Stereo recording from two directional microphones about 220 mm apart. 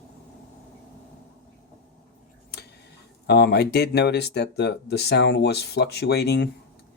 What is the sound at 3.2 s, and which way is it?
Speech, 50° left (ahead or behind).